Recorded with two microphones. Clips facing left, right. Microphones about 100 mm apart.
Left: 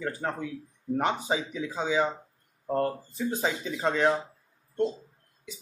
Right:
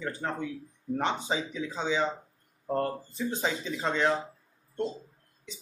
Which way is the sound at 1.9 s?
40° left (ahead or behind).